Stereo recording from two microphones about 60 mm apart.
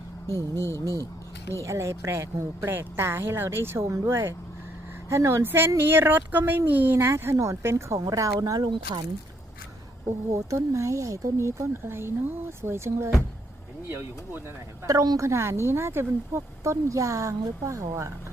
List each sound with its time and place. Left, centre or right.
0.3 s speech: left
1.6 s speech: right
2.6 s speech: right
8.0 s speech: right
10.3 s speech: right
13.8 s speech: right
14.8 s speech: right
15.3 s speech: right
16.9 s speech: right